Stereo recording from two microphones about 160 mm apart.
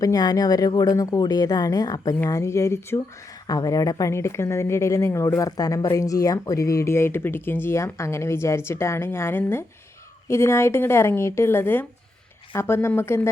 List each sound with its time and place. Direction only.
0.0 s speech: 25° left (ahead or behind)